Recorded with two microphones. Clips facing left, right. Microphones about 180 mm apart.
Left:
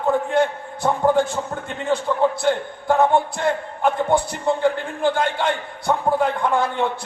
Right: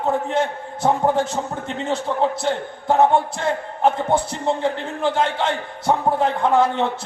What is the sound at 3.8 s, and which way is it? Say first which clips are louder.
A man's voice: even; 25° right (ahead or behind).